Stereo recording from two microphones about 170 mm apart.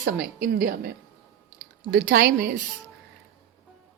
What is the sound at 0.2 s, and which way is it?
Speech, 60° right (ahead or behind).